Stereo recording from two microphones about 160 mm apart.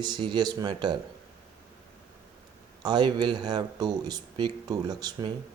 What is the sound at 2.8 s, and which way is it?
Speech, 30° right (ahead or behind).